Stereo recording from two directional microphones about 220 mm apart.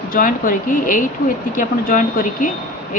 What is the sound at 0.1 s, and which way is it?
Speech, 40° left (ahead or behind).